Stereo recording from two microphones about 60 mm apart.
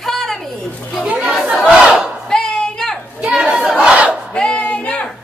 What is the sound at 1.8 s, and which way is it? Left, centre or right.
Battle cry, centre.